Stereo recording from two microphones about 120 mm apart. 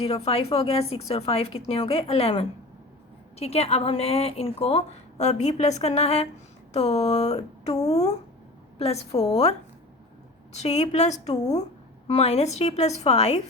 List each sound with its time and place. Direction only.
0.0 s speech: 55° left (ahead or behind)
10.5 s a woman's voice: 65° left (ahead or behind)